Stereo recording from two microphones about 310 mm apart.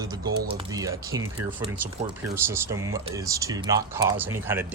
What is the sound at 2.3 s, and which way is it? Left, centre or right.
Speech, centre.